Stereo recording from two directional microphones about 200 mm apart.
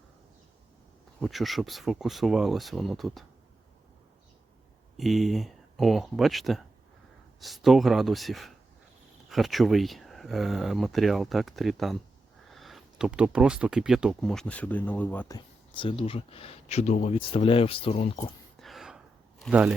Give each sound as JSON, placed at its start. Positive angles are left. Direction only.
{"t": 1.2, "sound": "speech", "side_deg": 0}
{"t": 4.9, "sound": "speech", "side_deg": 0}
{"t": 15.4, "sound": "speech", "side_deg": 25}
{"t": 18.6, "sound": "gasp", "side_deg": 0}